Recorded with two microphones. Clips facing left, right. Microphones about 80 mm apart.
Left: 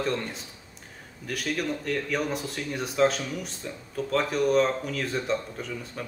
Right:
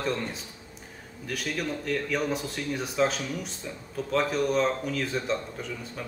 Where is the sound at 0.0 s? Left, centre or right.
Centre.